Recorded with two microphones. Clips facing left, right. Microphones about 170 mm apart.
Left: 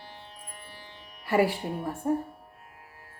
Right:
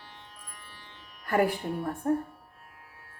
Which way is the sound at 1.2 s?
5° left (ahead or behind).